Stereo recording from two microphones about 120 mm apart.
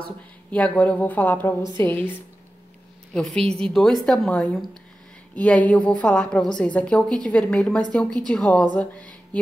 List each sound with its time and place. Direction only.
0.5 s a woman's voice: 10° left (ahead or behind)
3.3 s a woman's voice: 5° left (ahead or behind)